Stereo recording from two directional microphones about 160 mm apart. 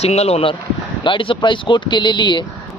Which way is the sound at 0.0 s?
40° left (ahead or behind).